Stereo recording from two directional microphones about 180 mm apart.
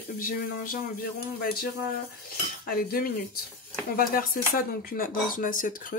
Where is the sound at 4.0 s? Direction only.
55° left (ahead or behind).